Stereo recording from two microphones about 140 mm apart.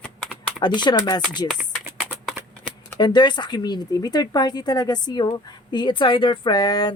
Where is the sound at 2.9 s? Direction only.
30° left (ahead or behind).